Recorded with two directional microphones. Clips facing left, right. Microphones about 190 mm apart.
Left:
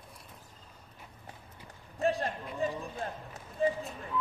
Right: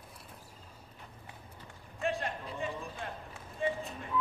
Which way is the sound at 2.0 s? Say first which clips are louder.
Left 4 dB; 40° left (ahead or behind).